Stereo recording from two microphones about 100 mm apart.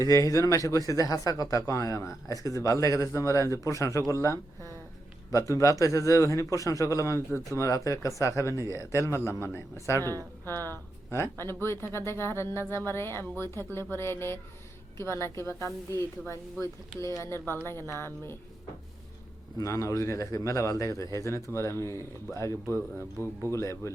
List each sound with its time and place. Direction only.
0.0 s a man's voice: 35° left (ahead or behind)
8.6 s speech: 30° right (ahead or behind)
8.9 s speech: 25° left (ahead or behind)
19.5 s a man's voice: 30° left (ahead or behind)